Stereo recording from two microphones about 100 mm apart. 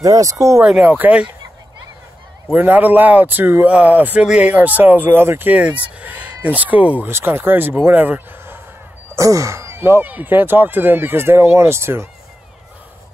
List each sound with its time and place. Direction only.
0.0 s speech: 35° right (ahead or behind)
0.6 s speech: 10° right (ahead or behind)
2.5 s speech: 15° right (ahead or behind)
9.1 s speech: 30° right (ahead or behind)